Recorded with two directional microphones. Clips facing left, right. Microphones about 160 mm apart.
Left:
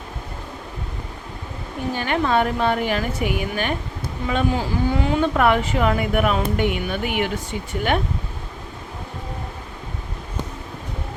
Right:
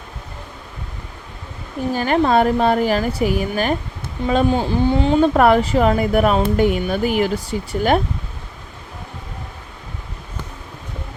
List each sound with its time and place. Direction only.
2.0 s speech: 35° right (ahead or behind)